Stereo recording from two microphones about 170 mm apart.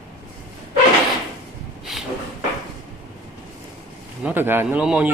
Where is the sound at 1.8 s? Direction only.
Centre (ahead or behind).